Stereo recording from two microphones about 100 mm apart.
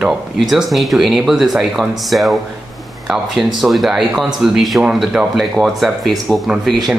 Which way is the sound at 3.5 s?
Centre (ahead or behind).